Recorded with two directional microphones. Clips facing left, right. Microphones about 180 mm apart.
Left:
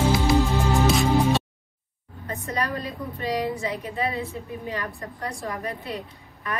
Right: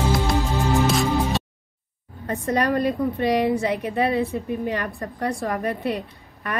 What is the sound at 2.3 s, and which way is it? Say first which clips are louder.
A woman's voice: right 7 dB; 65° right (ahead or behind).